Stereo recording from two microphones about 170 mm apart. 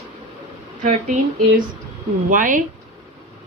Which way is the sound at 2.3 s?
50° right (ahead or behind).